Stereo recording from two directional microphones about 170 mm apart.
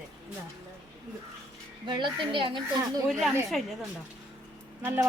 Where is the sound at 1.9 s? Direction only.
30° right (ahead or behind).